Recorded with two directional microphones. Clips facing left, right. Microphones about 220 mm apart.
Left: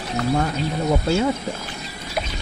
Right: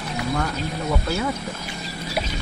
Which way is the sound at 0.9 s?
30° left (ahead or behind).